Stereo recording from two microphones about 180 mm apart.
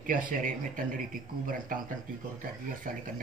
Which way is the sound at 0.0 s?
50° right (ahead or behind).